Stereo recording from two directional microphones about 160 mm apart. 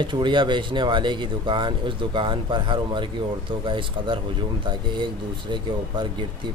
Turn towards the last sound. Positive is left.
turn(degrees=-30)  # may be behind; listen again after turning